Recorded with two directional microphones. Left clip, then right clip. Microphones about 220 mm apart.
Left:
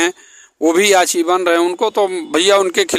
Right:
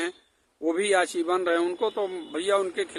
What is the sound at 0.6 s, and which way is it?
Speech, 45° left (ahead or behind).